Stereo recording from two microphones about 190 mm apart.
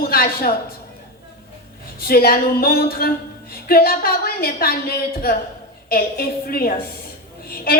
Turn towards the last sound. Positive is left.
turn(degrees=50)  # may be behind; listen again after turning